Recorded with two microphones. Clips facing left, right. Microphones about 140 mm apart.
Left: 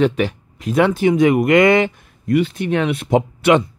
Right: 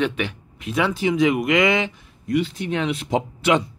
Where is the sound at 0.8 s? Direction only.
55° left (ahead or behind).